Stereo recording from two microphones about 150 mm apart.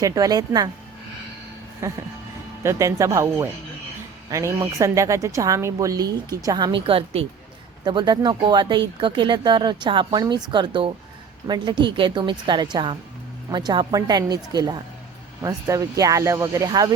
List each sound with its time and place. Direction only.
0.0 s a woman's voice: 25° right (ahead or behind)
1.8 s a woman's voice: 20° right (ahead or behind); by 7.3 s 40° right (ahead or behind)
7.9 s a woman's voice: 30° right (ahead or behind)